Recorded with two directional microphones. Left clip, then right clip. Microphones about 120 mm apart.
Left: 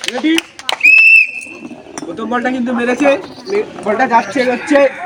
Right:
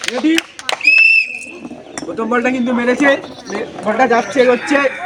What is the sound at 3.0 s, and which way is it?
A man's voice, 25° right (ahead or behind).